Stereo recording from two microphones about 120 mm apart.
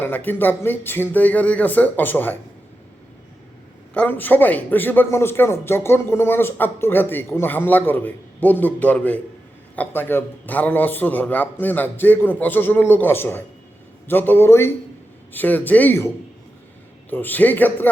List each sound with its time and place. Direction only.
0.0 s a man's voice: 15° left (ahead or behind)
3.9 s a man's voice: 15° left (ahead or behind)
17.1 s a man's voice: 15° left (ahead or behind)